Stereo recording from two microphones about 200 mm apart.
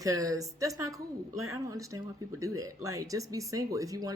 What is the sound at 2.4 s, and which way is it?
Speech, 15° right (ahead or behind).